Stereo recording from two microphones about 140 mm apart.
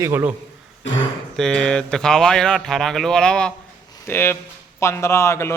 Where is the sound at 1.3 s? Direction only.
5° left (ahead or behind).